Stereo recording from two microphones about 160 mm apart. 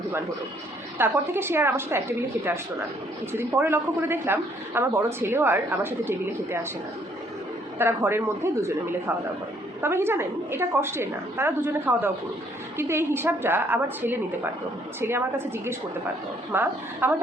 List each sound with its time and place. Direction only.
0.9 s speech: 15° right (ahead or behind)
7.8 s speech: 15° right (ahead or behind)